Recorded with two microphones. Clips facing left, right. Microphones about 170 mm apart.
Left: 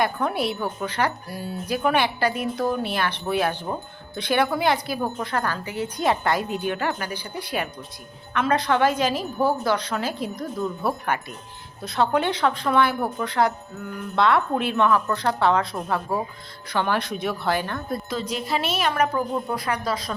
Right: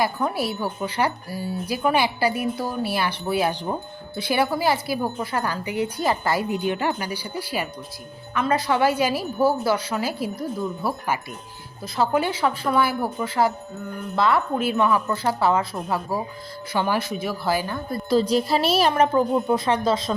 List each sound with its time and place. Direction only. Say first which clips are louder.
0.0 s a woman's voice: even; 5° right (ahead or behind)
6.0 s a woman's voice: left 3 dB; centre (ahead or behind)
18.1 s speech: right 10 dB; 35° right (ahead or behind)